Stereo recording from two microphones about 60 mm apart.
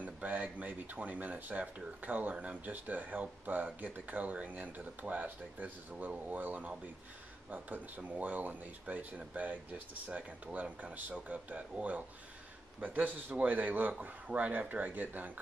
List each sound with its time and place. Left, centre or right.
0.0 s speech: right